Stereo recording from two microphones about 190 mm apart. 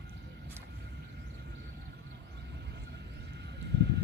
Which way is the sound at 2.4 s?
65° right (ahead or behind).